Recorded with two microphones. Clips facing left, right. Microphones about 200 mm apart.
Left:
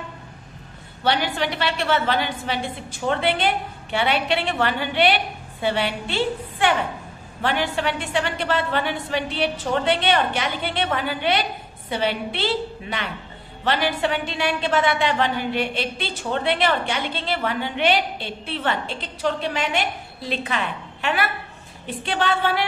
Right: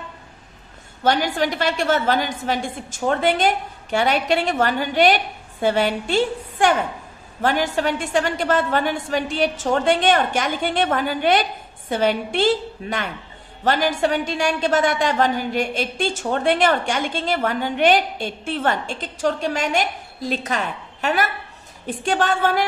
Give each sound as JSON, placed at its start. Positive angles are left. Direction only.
{"t": 1.0, "sound": "a woman's voice", "side_deg": -45}